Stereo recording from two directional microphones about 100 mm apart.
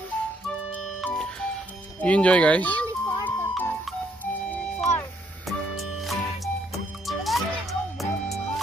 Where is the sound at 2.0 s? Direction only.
10° left (ahead or behind).